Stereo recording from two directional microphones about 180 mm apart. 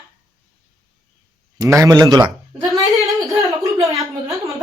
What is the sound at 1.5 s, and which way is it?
Speech, 20° right (ahead or behind).